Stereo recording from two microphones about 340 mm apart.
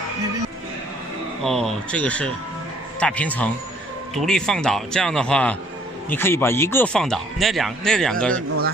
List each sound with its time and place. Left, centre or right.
1.4 s speech: centre